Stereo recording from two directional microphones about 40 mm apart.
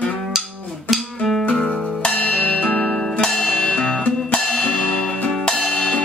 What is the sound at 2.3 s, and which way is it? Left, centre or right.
Music, left.